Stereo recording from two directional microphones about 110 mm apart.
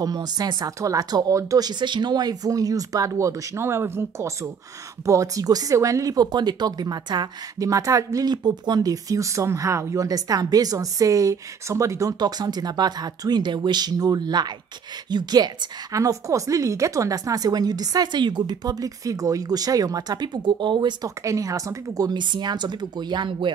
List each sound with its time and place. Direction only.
0.0 s speech: 35° right (ahead or behind)
21.2 s speech: 30° right (ahead or behind); by 23.5 s 45° right (ahead or behind)